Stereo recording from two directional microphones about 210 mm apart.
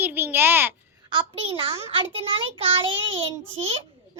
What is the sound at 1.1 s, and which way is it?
A child's voice, 25° right (ahead or behind).